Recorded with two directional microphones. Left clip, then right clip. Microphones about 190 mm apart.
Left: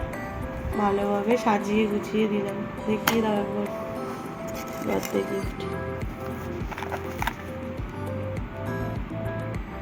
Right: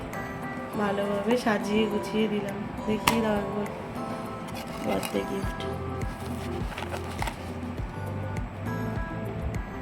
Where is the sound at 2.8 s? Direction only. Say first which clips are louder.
Left 1 dB; centre (ahead or behind).